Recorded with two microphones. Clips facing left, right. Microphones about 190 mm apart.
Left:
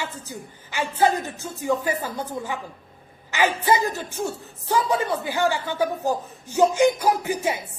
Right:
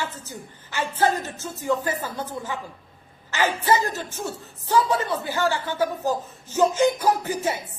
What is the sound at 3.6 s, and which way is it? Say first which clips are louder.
Speech: left 1 dB; 15° left (ahead or behind).